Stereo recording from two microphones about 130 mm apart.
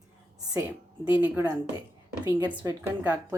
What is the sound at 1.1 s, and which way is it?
Speech, 15° right (ahead or behind).